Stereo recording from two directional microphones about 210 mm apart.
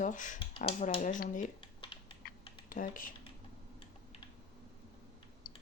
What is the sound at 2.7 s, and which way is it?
Speech, 40° left (ahead or behind).